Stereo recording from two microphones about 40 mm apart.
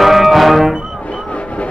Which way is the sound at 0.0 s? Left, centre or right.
Centre.